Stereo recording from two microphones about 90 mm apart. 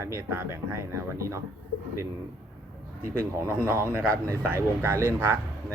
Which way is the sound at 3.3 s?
30° right (ahead or behind).